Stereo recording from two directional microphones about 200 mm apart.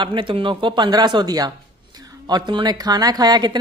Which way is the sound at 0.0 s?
25° right (ahead or behind).